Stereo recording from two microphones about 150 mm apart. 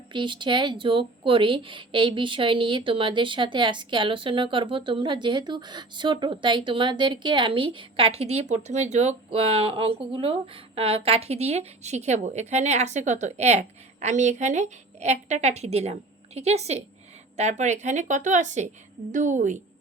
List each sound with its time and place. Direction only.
0.1 s a woman's voice: 30° right (ahead or behind); by 19.5 s 55° right (ahead or behind)